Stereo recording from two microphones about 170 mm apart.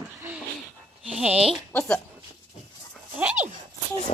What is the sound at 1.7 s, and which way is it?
Speech, 10° left (ahead or behind).